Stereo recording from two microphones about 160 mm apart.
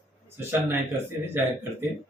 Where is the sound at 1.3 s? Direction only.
15° right (ahead or behind).